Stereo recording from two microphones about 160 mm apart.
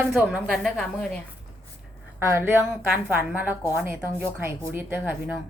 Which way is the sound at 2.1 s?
15° right (ahead or behind).